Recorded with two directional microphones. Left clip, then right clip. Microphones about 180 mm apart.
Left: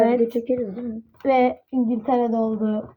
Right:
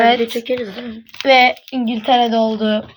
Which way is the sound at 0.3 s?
10° left (ahead or behind).